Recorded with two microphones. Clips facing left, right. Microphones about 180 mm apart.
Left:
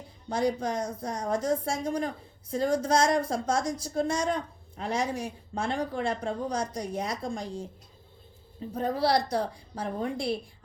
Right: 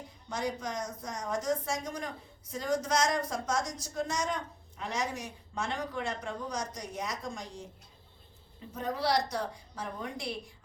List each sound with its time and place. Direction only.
0.3 s a woman's voice: 30° left (ahead or behind)
8.7 s a woman's voice: 30° left (ahead or behind)